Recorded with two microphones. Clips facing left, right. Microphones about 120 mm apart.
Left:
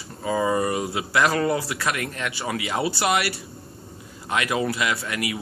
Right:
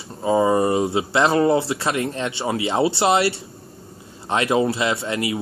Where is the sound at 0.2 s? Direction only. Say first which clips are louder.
Right 5 dB; 25° right (ahead or behind).